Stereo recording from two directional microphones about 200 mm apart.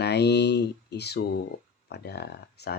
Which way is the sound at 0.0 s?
55° left (ahead or behind).